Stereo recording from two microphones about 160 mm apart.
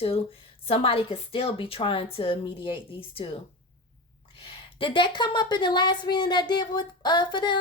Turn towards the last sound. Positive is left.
turn(degrees=30)  # may be behind; listen again after turning